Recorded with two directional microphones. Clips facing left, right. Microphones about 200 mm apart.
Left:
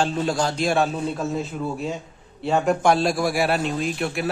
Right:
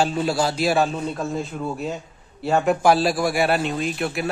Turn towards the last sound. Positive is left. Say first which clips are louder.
# even
turn(degrees=0)  # may be behind; listen again after turning